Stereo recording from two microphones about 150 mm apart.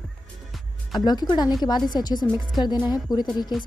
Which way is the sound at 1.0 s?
30° left (ahead or behind).